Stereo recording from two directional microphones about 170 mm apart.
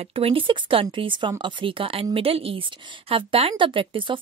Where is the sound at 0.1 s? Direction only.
30° right (ahead or behind).